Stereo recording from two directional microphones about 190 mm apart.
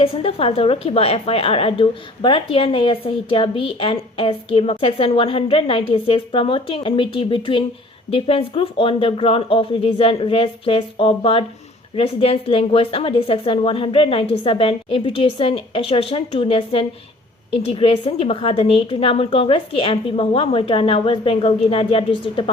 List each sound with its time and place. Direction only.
0.0 s a woman's voice: 30° left (ahead or behind)